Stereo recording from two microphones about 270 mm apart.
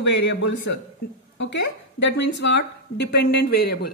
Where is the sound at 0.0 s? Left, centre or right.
Left.